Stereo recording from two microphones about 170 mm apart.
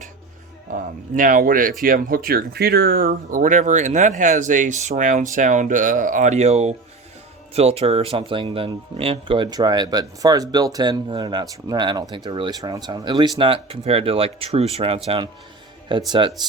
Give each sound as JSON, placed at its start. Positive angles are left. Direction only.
{"t": 0.7, "sound": "speech", "side_deg": -50}